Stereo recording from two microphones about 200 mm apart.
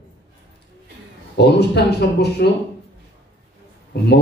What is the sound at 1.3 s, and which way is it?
Speech, 55° left (ahead or behind).